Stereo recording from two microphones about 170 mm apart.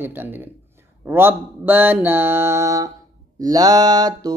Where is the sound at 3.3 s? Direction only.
20° right (ahead or behind).